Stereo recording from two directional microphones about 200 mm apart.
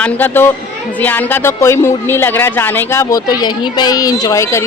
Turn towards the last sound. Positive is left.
turn(degrees=15)  # may be behind; listen again after turning